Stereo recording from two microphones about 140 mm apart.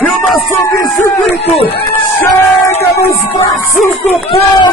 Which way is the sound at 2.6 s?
20° left (ahead or behind).